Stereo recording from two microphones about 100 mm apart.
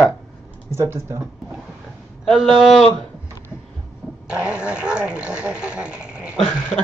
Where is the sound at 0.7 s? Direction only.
25° right (ahead or behind).